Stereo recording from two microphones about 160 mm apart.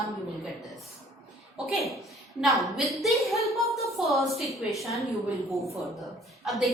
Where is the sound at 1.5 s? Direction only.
Centre (ahead or behind).